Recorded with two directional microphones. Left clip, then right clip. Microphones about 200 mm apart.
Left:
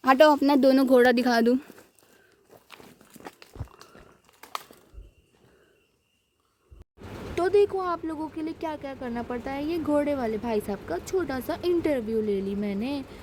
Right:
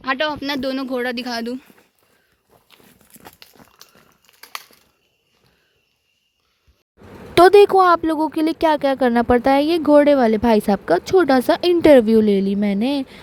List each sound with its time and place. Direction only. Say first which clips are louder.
0.0 s speech: left 3 dB; 55° left (ahead or behind)
3.1 s a sound: right 2 dB; 10° left (ahead or behind)
7.3 s speech: right 13 dB; 45° right (ahead or behind)